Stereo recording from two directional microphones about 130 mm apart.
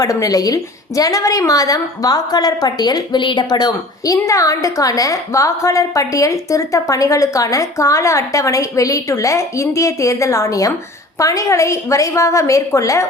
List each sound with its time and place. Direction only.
0.0 s a woman's voice: 25° left (ahead or behind)